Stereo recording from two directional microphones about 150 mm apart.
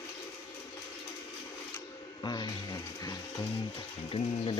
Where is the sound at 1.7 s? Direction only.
25° left (ahead or behind).